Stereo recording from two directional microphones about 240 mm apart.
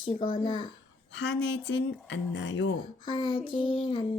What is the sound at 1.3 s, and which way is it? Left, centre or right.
Speech, left.